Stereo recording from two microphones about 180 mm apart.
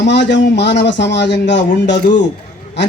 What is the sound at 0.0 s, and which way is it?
Speech, 75° left (ahead or behind).